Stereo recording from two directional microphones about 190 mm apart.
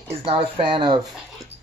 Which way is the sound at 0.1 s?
30° right (ahead or behind).